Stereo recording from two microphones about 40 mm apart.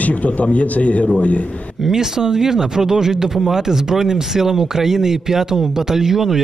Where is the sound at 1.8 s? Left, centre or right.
Centre.